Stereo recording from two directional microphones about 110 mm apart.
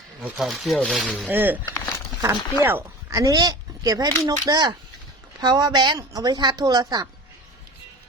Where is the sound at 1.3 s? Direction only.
15° right (ahead or behind).